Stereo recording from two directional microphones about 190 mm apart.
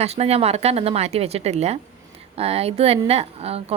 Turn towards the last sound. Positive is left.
turn(degrees=-30)  # may be behind; listen again after turning